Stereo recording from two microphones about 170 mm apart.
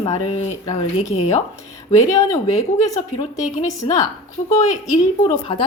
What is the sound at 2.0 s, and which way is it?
Speech, 20° left (ahead or behind).